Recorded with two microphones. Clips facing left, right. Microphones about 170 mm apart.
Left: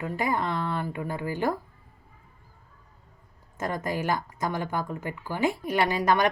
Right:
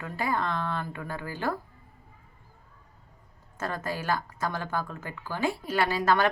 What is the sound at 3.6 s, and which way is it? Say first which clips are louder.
A woman's voice: left 3 dB; 15° left (ahead or behind).